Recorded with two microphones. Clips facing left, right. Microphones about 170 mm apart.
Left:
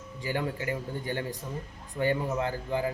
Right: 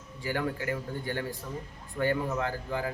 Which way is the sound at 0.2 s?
20° left (ahead or behind).